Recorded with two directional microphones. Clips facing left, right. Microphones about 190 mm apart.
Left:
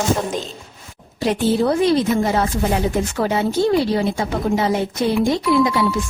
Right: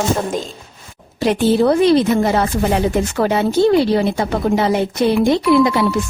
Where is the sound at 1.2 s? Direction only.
70° right (ahead or behind).